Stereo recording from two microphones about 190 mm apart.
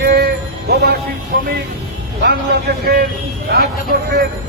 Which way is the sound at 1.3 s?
50° right (ahead or behind).